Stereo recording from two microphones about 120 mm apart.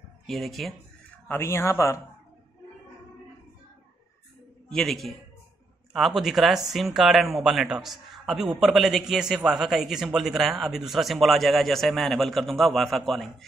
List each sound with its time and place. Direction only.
0.3 s speech: centre (ahead or behind)
1.2 s speech: 20° left (ahead or behind)
4.6 s speech: 5° left (ahead or behind)